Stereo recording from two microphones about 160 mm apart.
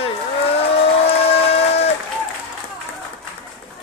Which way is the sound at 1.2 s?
40° left (ahead or behind).